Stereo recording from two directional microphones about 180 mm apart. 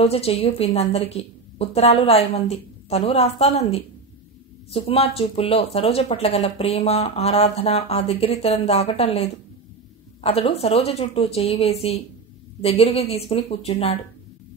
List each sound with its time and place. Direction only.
0.0 s speech: 35° left (ahead or behind)